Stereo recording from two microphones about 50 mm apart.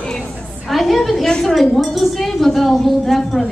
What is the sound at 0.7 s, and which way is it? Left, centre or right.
A woman's voice, centre.